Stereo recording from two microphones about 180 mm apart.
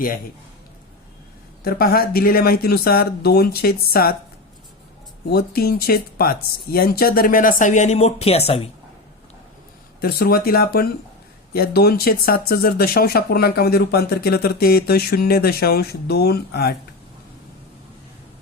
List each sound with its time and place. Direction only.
1.6 s speech: 55° left (ahead or behind)
5.3 s speech: 60° left (ahead or behind); by 8.7 s 35° left (ahead or behind)
10.0 s speech: 55° left (ahead or behind)